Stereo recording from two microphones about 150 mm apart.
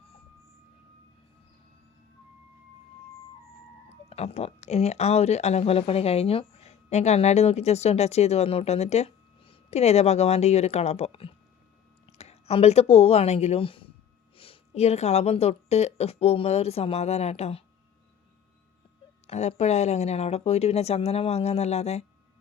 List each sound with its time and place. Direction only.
4.1 s speech: 45° left (ahead or behind)
19.3 s speech: 45° left (ahead or behind)